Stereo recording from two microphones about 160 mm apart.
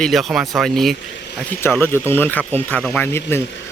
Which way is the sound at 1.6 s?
15° left (ahead or behind).